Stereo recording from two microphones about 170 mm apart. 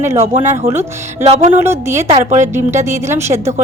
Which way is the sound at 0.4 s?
15° right (ahead or behind).